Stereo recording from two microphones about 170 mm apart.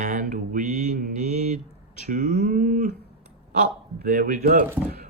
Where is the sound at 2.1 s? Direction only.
45° right (ahead or behind).